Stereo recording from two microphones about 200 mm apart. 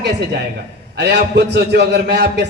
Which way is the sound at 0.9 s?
55° right (ahead or behind).